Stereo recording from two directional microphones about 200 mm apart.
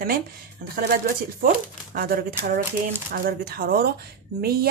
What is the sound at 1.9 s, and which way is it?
A woman's voice, 45° right (ahead or behind).